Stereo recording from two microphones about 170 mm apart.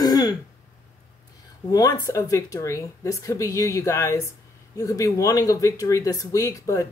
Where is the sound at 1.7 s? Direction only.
20° left (ahead or behind).